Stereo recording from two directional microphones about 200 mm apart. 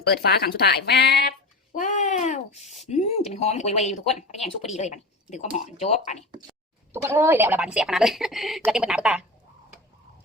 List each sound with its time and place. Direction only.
0.0 s speech: 55° left (ahead or behind)
1.7 s speech: 40° left (ahead or behind)
6.9 s speech: 15° right (ahead or behind)